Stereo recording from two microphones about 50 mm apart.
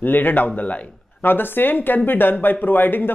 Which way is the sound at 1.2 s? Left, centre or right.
Left.